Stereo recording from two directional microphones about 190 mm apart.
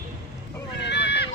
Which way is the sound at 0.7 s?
65° left (ahead or behind).